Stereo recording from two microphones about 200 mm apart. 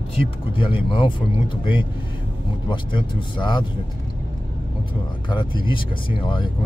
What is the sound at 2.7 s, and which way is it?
Speech, 25° left (ahead or behind).